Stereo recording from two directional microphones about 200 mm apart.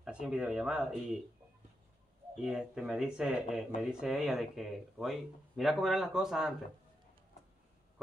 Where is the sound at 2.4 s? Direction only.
Centre (ahead or behind).